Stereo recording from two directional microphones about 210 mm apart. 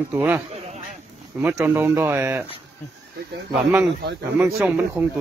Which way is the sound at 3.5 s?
5° right (ahead or behind).